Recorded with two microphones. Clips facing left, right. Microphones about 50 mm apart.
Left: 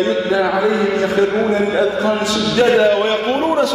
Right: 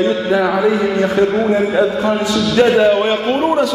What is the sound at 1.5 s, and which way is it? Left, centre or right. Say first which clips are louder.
Mantra: right 1 dB; centre.